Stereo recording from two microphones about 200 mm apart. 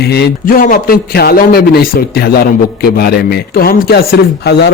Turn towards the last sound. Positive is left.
turn(degrees=50)  # may be behind; listen again after turning